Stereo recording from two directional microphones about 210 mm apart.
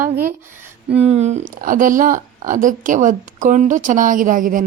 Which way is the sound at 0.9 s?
30° right (ahead or behind).